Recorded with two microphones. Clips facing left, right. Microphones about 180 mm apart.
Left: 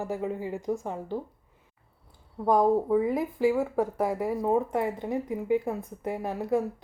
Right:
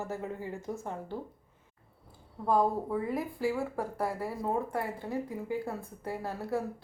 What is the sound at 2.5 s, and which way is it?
Speech, 15° left (ahead or behind).